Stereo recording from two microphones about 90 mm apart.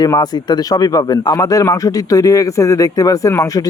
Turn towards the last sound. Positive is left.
turn(degrees=35)  # may be behind; listen again after turning